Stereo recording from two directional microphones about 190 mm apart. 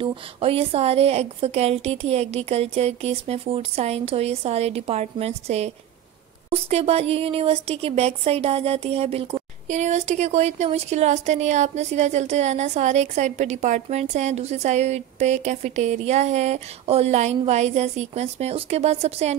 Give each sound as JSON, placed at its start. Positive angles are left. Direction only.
{"t": 0.0, "sound": "speech", "side_deg": -30}